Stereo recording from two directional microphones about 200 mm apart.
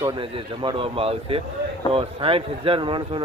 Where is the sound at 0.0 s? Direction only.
20° right (ahead or behind).